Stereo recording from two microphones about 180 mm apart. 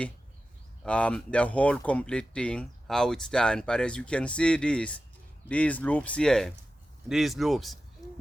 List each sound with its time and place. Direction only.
0.9 s speech: 5° left (ahead or behind)
8.0 s hoot: 20° left (ahead or behind)